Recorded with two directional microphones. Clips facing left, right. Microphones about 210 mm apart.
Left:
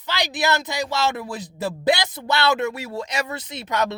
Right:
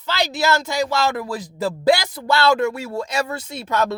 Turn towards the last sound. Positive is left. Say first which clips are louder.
# right 2 dB
turn(degrees=20)  # may be behind; listen again after turning